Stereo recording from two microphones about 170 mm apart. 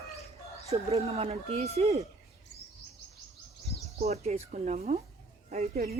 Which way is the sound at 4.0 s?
40° right (ahead or behind).